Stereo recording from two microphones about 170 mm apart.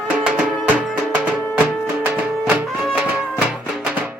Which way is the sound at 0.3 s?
5° right (ahead or behind).